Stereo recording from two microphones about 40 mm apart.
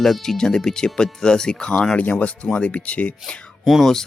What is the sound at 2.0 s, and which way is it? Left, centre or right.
Speech, left.